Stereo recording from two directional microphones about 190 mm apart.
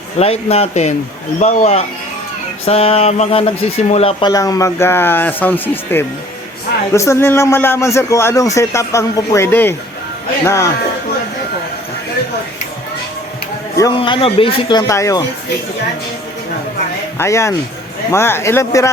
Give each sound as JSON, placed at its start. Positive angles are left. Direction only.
{"t": 0.2, "sound": "a sound", "side_deg": 30}
{"t": 4.3, "sound": "a man's voice", "side_deg": 20}
{"t": 13.7, "sound": "speech", "side_deg": 20}
{"t": 17.2, "sound": "a man's voice", "side_deg": 15}